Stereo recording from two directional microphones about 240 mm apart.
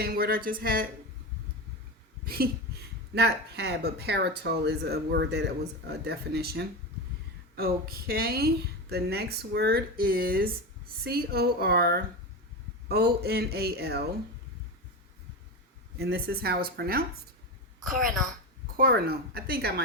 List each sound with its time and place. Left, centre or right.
0.0 s speech: right
2.2 s speech: right
16.0 s speech: right
18.7 s speech: right